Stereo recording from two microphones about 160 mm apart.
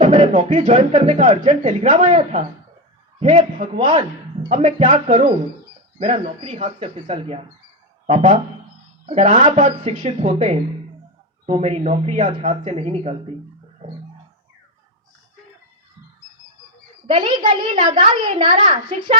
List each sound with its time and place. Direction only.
0.0 s speech: 45° right (ahead or behind)
3.8 s speech: 30° right (ahead or behind)
4.6 s speech: 45° right (ahead or behind)
6.0 s a man's voice: 40° right (ahead or behind)
17.1 s a child's voice: 30° right (ahead or behind)